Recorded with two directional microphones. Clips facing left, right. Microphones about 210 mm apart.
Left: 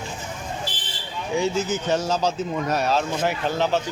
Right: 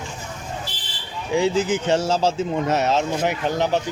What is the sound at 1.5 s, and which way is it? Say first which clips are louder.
Speech: right 3 dB; 30° right (ahead or behind).